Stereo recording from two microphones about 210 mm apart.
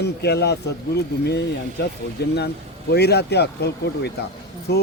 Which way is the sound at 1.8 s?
50° left (ahead or behind).